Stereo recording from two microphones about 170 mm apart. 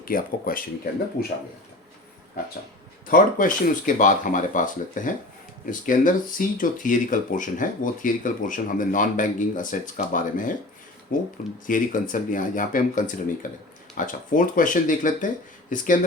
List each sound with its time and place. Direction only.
0.0 s speech: 55° left (ahead or behind)
3.1 s speech: 50° left (ahead or behind)